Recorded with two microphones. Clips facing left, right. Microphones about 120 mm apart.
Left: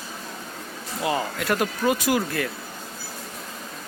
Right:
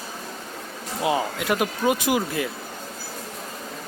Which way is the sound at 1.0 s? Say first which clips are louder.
Right 2 dB; 15° right (ahead or behind).